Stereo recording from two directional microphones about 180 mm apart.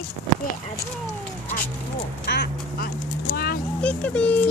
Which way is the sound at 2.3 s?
65° left (ahead or behind).